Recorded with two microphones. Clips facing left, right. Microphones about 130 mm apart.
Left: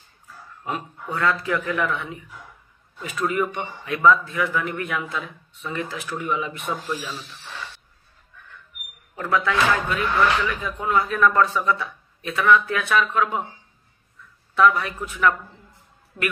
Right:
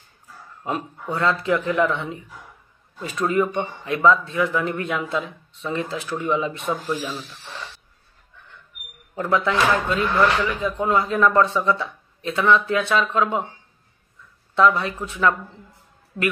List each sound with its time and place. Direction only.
0.7 s speech: 30° right (ahead or behind)
9.3 s speech: 25° right (ahead or behind)
14.5 s speech: 25° right (ahead or behind)